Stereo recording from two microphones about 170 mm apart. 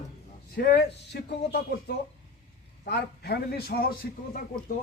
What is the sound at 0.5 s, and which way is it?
Speech, 70° left (ahead or behind).